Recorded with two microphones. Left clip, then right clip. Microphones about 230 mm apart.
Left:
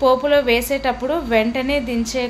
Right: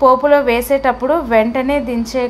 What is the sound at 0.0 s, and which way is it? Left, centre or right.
A woman's voice, centre.